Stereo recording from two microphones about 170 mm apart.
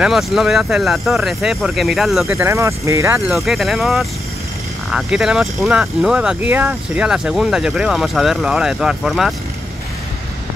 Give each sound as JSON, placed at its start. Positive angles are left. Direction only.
{"t": 0.0, "sound": "speech", "side_deg": 0}
{"t": 2.2, "sound": "speech", "side_deg": -15}
{"t": 3.3, "sound": "speech", "side_deg": 0}